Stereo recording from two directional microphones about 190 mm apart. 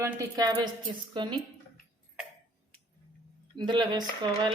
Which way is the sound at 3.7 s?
25° right (ahead or behind).